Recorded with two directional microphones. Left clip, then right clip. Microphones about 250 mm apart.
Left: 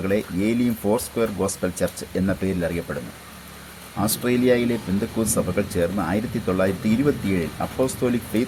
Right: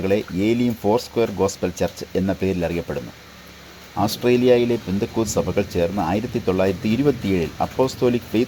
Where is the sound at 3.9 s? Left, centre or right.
Right.